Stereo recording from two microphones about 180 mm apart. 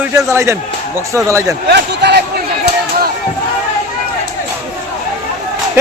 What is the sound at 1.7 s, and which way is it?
Speech, 70° right (ahead or behind).